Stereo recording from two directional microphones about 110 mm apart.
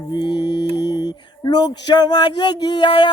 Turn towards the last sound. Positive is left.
turn(degrees=45)  # may be behind; listen again after turning